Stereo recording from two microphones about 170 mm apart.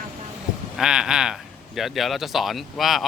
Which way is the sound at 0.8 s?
5° right (ahead or behind).